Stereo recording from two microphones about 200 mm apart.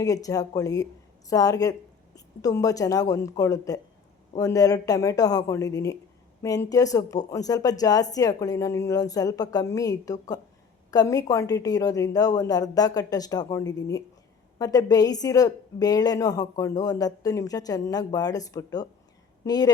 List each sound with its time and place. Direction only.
0.0 s a woman's voice: 15° left (ahead or behind)